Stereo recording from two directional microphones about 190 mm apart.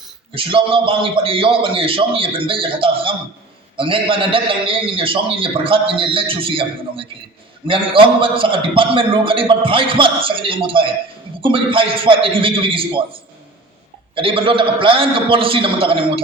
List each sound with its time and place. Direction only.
0.3 s a man's voice: 30° right (ahead or behind)